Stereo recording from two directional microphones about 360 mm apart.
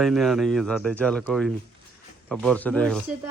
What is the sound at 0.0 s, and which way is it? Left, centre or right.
A man's voice, centre.